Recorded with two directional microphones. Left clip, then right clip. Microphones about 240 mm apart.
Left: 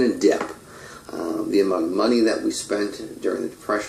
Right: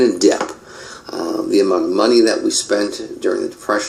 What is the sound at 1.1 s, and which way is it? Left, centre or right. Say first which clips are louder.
Speech: right 5 dB; right.